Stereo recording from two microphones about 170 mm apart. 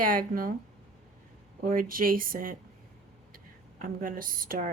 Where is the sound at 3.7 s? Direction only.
55° right (ahead or behind).